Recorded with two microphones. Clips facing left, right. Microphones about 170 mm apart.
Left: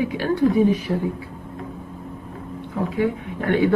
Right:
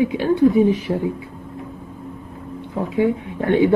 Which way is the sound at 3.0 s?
20° right (ahead or behind).